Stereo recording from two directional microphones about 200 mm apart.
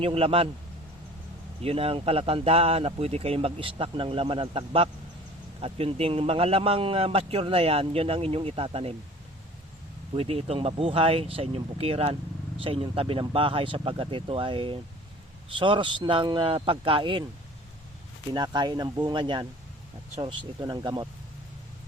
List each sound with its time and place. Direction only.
0.0 s a man's voice: 30° right (ahead or behind)
1.6 s a man's voice: 30° right (ahead or behind)
10.2 s a man's voice: 30° right (ahead or behind)
18.3 s a man's voice: 20° right (ahead or behind)